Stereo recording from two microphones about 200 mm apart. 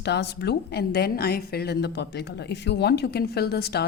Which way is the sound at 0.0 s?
55° left (ahead or behind).